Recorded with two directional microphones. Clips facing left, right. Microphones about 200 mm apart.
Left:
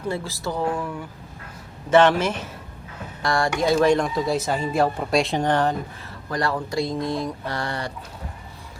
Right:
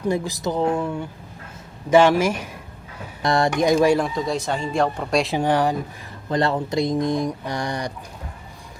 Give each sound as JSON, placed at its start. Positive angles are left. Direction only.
{"t": 0.1, "sound": "speech", "side_deg": -20}
{"t": 1.9, "sound": "speech", "side_deg": -10}
{"t": 3.2, "sound": "speech", "side_deg": -20}
{"t": 6.2, "sound": "speech", "side_deg": -25}